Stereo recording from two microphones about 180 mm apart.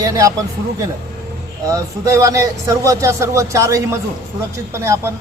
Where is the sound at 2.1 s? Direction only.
15° right (ahead or behind).